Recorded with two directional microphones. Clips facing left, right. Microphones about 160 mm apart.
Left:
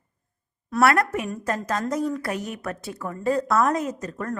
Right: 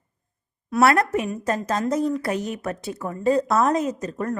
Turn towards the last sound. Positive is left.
turn(degrees=-20)  # may be behind; listen again after turning